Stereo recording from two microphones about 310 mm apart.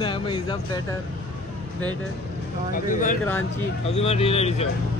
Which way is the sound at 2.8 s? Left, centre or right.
Left.